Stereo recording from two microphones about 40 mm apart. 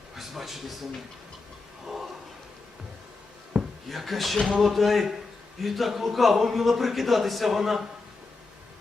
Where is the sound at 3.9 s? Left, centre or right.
Centre.